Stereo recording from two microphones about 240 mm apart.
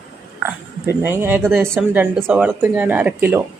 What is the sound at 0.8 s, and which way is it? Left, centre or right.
Speech, centre.